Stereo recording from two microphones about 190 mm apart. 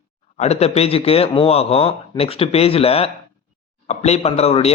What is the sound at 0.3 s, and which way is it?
A man's voice, 35° left (ahead or behind).